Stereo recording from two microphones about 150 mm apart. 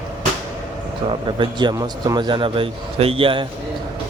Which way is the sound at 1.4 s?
30° right (ahead or behind).